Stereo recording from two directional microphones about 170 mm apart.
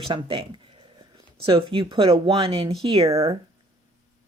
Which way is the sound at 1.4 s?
30° right (ahead or behind).